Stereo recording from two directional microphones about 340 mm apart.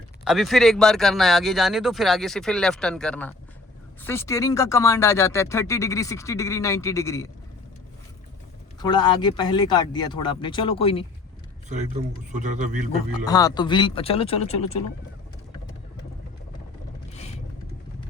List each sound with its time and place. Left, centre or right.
0.3 s speech: centre
8.8 s speech: centre
11.7 s speech: right
12.9 s speech: centre
17.1 s vehicle: centre